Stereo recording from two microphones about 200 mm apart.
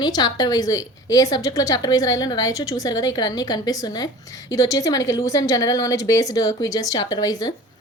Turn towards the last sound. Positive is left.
turn(degrees=20)  # may be behind; listen again after turning